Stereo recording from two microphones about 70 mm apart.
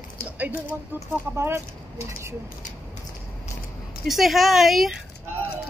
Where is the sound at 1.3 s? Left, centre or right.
Right.